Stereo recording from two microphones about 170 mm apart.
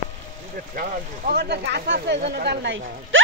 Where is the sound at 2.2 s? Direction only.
70° right (ahead or behind).